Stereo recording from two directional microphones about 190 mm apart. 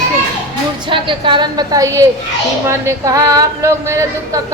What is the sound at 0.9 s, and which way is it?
A woman's voice, 25° right (ahead or behind).